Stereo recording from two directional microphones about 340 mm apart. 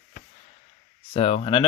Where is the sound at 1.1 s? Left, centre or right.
Centre.